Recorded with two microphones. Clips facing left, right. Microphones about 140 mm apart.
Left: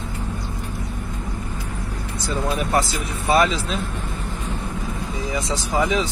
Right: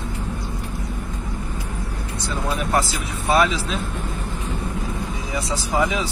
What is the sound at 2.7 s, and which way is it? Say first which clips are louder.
Speech: left 1 dB; centre (ahead or behind).